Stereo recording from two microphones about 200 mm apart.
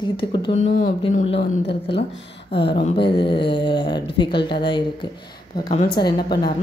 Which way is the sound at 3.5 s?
25° left (ahead or behind).